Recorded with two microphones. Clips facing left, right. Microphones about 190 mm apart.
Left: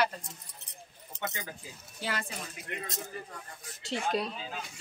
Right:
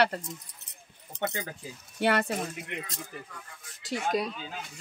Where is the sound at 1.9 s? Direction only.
65° right (ahead or behind).